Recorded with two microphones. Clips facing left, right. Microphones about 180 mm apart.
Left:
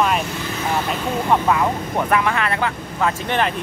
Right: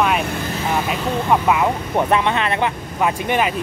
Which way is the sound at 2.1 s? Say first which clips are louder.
Even; 25° right (ahead or behind).